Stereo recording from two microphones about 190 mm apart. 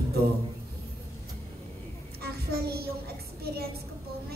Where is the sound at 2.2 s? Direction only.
55° right (ahead or behind).